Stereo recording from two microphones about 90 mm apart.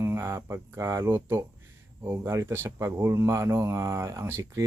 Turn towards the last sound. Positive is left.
turn(degrees=-30)  # may be behind; listen again after turning